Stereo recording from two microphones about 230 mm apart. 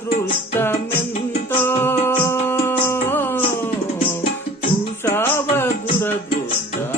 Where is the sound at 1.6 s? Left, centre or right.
Centre.